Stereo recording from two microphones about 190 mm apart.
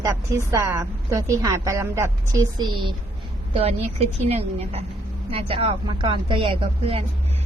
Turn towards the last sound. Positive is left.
turn(degrees=-30)  # may be behind; listen again after turning